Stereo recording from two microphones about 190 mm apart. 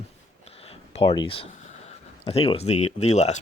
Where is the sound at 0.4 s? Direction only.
30° left (ahead or behind).